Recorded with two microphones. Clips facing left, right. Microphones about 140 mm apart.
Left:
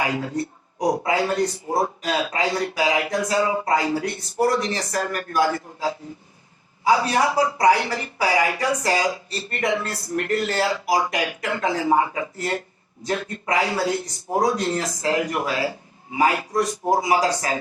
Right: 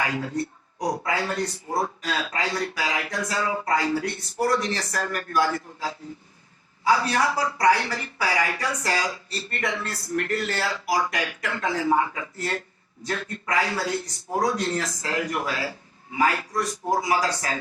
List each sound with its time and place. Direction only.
0.0 s speech: 20° left (ahead or behind)